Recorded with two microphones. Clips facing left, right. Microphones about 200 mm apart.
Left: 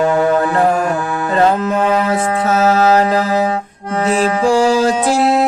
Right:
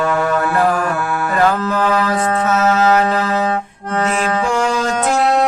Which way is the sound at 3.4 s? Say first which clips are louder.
Left 1 dB; 10° left (ahead or behind).